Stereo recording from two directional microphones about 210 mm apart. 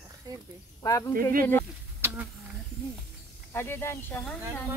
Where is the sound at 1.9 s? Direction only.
10° right (ahead or behind).